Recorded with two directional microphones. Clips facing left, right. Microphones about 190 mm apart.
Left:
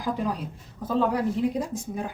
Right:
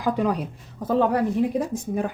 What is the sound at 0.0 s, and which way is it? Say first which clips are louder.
Speech: right 5 dB; 70° right (ahead or behind).